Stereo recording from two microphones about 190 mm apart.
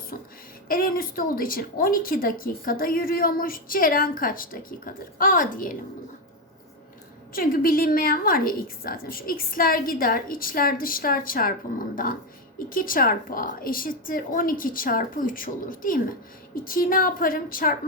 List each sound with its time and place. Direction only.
0.7 s a woman's voice: 50° left (ahead or behind)
7.3 s a woman's voice: 50° left (ahead or behind)